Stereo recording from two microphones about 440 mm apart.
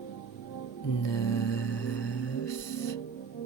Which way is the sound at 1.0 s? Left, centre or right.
Left.